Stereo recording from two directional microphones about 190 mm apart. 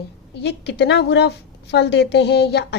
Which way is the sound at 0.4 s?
65° left (ahead or behind).